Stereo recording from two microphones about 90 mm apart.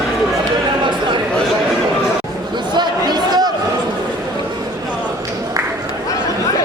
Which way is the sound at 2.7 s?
55° right (ahead or behind).